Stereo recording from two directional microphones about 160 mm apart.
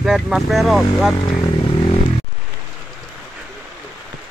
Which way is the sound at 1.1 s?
25° left (ahead or behind).